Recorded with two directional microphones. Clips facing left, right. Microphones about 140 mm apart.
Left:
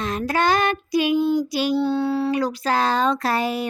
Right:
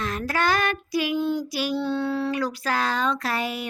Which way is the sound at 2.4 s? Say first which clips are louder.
Left 4 dB; 25° left (ahead or behind).